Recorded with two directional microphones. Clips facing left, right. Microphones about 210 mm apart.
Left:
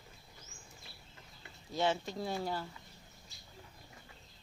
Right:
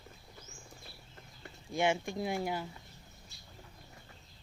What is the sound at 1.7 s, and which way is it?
Speech, 10° right (ahead or behind).